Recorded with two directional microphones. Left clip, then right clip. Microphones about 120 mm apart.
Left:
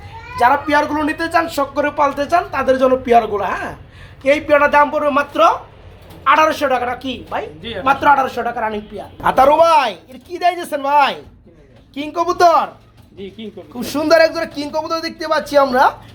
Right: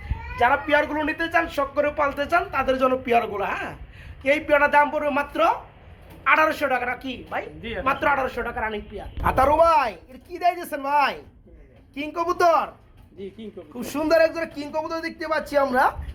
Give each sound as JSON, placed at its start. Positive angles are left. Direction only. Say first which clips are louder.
{"t": 0.3, "sound": "a woman's voice", "louder": "left 6 dB", "side_deg": -10}
{"t": 9.2, "sound": "a woman's voice", "louder": "left 7 dB", "side_deg": 10}
{"t": 13.7, "sound": "speech", "louder": "left 7 dB", "side_deg": 20}